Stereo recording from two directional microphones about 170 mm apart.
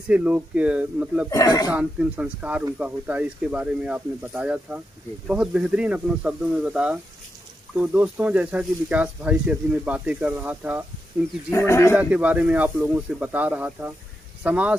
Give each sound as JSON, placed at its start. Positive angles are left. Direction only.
{"t": 0.1, "sound": "speech", "side_deg": -10}
{"t": 1.3, "sound": "speech", "side_deg": 20}
{"t": 1.7, "sound": "speech", "side_deg": -10}
{"t": 11.5, "sound": "speech", "side_deg": 15}
{"t": 11.9, "sound": "speech", "side_deg": -10}